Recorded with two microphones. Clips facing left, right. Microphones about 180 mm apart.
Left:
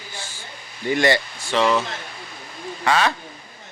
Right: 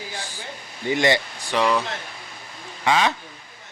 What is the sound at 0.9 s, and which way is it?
Speech, 20° right (ahead or behind).